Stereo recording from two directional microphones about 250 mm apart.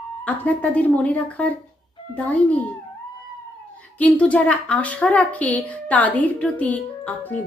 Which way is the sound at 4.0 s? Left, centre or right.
Centre.